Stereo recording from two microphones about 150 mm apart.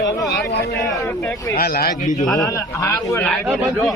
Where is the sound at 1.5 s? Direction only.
90° left.